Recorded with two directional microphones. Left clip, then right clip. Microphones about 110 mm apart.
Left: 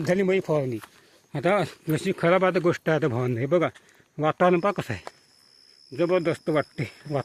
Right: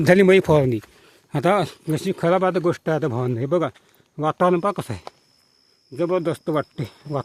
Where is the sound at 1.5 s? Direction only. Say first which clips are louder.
Right 3 dB; 40° right (ahead or behind); by 7.2 s 25° right (ahead or behind).